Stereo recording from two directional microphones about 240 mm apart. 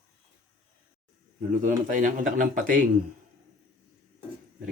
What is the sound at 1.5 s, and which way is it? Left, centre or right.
Speech, right.